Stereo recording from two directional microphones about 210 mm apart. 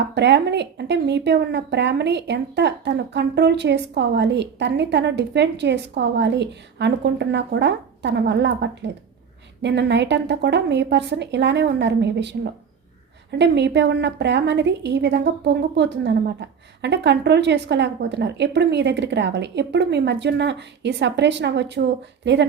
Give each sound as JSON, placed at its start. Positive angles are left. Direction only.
{"t": 0.1, "sound": "a woman's voice", "side_deg": -55}